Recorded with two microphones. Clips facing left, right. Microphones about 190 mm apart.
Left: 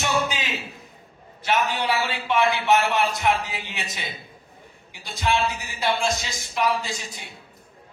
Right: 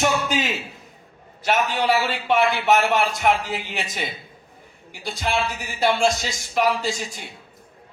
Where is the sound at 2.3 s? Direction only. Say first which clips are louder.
Right 1 dB; 45° right (ahead or behind).